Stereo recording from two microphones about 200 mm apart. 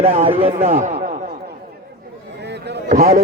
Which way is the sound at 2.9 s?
50° right (ahead or behind).